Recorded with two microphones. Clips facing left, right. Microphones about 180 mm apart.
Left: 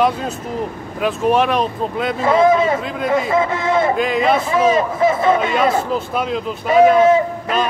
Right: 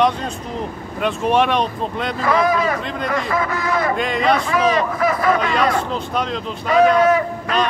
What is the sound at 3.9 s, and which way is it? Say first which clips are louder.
Speech: left 2 dB; centre (ahead or behind).